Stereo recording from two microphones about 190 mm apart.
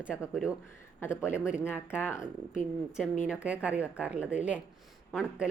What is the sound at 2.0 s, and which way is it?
Speech, 15° left (ahead or behind).